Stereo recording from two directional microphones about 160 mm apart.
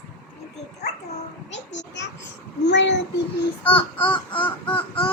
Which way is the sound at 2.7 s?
90° left.